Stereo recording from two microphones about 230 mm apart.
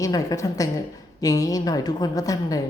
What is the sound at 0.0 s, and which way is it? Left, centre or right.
Speech, centre.